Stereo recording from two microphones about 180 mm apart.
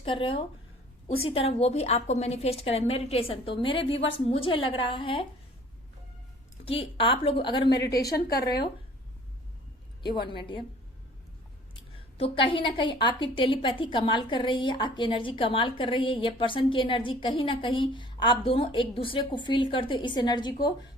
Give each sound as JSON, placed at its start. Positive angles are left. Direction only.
{"t": 0.0, "sound": "a woman's voice", "side_deg": 30}
{"t": 6.7, "sound": "a woman's voice", "side_deg": 30}
{"t": 10.0, "sound": "a woman's voice", "side_deg": 25}
{"t": 12.2, "sound": "a woman's voice", "side_deg": 30}